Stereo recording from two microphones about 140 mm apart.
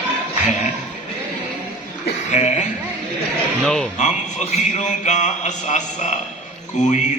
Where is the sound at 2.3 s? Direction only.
60° left (ahead or behind).